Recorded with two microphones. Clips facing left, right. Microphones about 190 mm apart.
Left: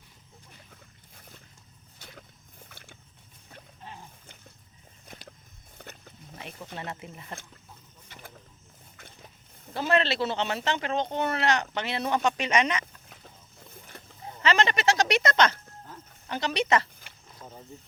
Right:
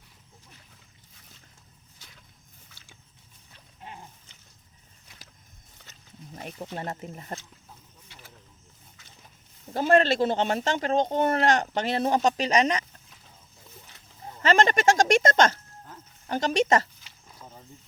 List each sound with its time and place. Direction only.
2.6 s boat: 55° left (ahead or behind)
5.7 s wild animals: 55° left (ahead or behind)
6.3 s speech: 40° right (ahead or behind)
8.0 s vehicle: 55° left (ahead or behind)
9.7 s speech: 45° right (ahead or behind)
13.9 s a sound: 55° left (ahead or behind)
14.4 s speech: 45° right (ahead or behind)